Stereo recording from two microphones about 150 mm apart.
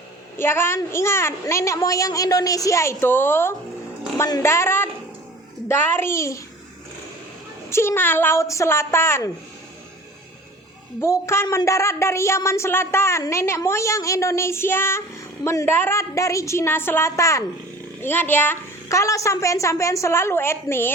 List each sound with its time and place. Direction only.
0.3 s a woman's voice: 15° left (ahead or behind)
7.7 s a woman's voice: 15° left (ahead or behind)
11.0 s a woman's voice: 20° left (ahead or behind)